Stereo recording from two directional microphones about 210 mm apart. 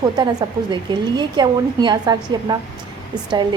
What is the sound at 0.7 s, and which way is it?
A woman's voice, 20° right (ahead or behind).